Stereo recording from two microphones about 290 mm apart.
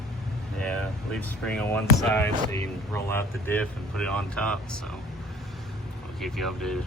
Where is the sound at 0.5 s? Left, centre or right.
Centre.